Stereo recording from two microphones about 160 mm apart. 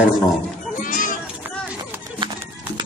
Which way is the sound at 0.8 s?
55° left (ahead or behind).